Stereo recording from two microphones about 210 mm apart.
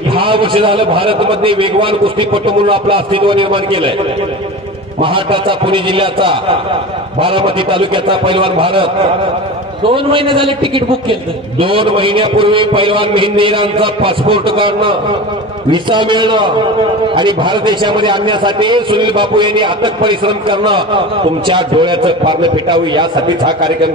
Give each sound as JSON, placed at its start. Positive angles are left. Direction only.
{"t": 0.1, "sound": "a man's voice", "side_deg": -25}
{"t": 5.0, "sound": "a man's voice", "side_deg": -25}
{"t": 9.8, "sound": "a man's voice", "side_deg": -25}